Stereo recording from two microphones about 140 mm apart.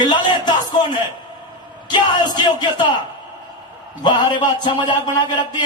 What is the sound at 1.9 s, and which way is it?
Speech, 30° left (ahead or behind).